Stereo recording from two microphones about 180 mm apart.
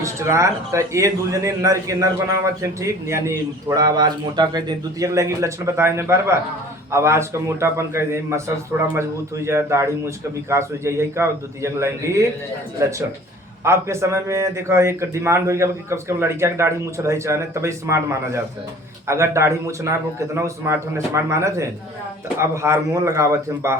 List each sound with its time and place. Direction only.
0.0 s speech: 15° right (ahead or behind)
13.7 s speech: 15° right (ahead or behind)